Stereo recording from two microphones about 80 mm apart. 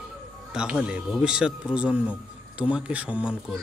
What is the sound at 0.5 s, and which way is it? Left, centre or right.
Speech, centre.